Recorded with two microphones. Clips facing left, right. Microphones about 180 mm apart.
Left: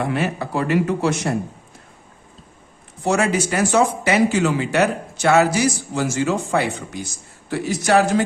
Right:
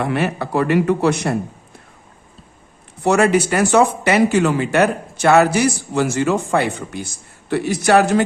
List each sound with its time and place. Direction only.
0.0 s speech: 65° right (ahead or behind)
3.0 s speech: 65° right (ahead or behind)